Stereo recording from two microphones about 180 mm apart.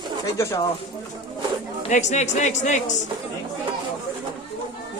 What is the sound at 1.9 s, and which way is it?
Speech, 40° left (ahead or behind).